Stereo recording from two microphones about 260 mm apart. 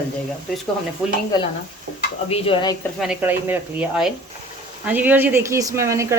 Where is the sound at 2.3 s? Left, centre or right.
Centre.